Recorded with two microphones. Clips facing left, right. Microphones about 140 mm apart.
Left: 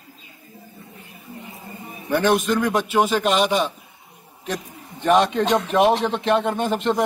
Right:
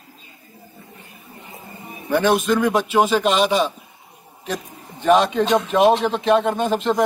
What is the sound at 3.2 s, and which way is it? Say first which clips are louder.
Speech: right 1 dB; 15° left (ahead or behind).